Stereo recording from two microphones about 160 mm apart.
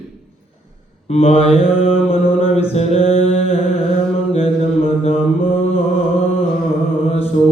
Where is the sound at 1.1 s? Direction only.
40° left (ahead or behind).